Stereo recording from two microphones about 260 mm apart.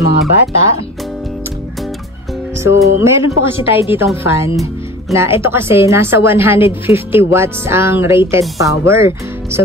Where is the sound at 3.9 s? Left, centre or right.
Centre.